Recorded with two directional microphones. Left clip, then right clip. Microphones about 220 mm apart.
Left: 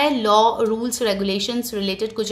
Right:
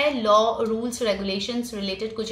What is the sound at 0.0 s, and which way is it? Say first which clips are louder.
A woman's voice: left 3 dB; 50° left (ahead or behind).